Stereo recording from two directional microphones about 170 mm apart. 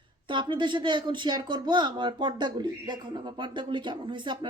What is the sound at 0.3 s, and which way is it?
Speech, 25° right (ahead or behind).